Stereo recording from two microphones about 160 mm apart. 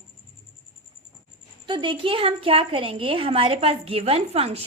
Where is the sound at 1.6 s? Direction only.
30° right (ahead or behind).